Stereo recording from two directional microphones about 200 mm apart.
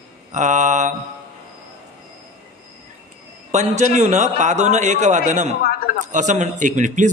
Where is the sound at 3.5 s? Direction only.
35° right (ahead or behind).